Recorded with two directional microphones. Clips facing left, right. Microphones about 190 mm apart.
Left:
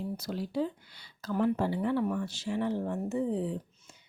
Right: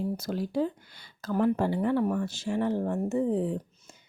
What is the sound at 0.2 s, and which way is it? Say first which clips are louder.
Speech: right 3 dB; 50° right (ahead or behind).